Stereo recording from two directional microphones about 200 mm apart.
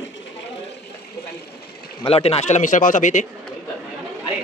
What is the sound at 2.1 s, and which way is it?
Speech, 30° left (ahead or behind).